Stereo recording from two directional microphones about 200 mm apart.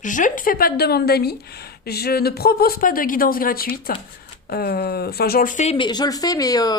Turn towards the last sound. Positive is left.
turn(degrees=20)  # may be behind; listen again after turning